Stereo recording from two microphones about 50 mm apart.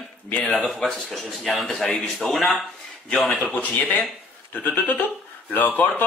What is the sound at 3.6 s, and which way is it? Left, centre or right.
Speech, left.